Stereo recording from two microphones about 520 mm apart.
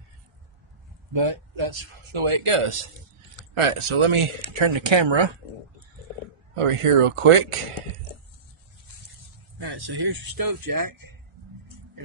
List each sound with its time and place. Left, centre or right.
1.1 s speech: right
6.5 s speech: right
9.6 s speech: right